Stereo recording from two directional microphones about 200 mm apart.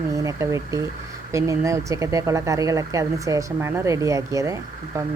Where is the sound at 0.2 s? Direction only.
15° right (ahead or behind).